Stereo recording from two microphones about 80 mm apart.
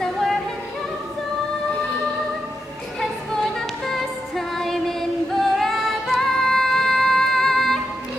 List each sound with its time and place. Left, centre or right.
0.0 s music: centre
3.5 s music: centre